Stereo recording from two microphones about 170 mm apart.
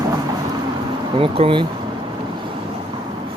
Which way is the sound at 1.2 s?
30° right (ahead or behind).